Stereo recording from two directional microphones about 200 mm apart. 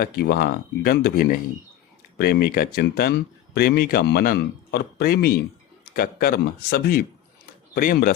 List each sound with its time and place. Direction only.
0.0 s speech: 50° left (ahead or behind)